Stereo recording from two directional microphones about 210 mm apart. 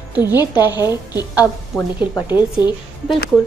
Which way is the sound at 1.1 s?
15° left (ahead or behind).